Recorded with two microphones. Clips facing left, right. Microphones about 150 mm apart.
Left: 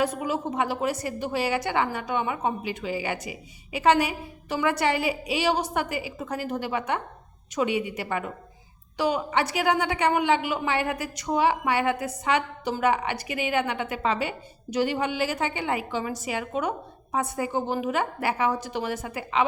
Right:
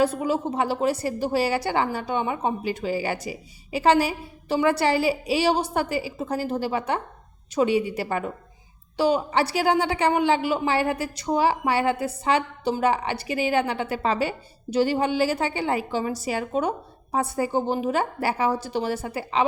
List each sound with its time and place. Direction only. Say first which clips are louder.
0.0 s a woman's voice: right 4 dB; 30° right (ahead or behind)